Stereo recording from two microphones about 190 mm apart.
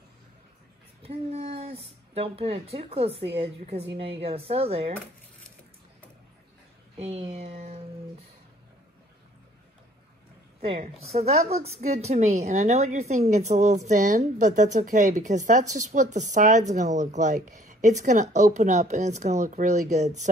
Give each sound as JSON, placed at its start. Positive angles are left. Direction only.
{"t": 1.0, "sound": "a woman's voice", "side_deg": -35}
{"t": 7.0, "sound": "a sound", "side_deg": -30}
{"t": 10.6, "sound": "a woman's voice", "side_deg": -30}